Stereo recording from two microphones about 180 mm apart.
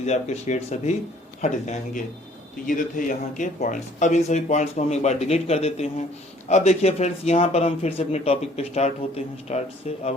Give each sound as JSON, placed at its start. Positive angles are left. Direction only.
{"t": 0.0, "sound": "speech", "side_deg": 40}